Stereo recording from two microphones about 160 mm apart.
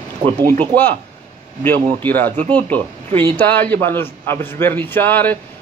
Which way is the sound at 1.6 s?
10° left (ahead or behind).